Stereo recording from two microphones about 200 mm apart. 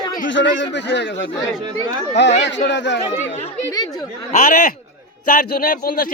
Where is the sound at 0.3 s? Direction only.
65° left (ahead or behind).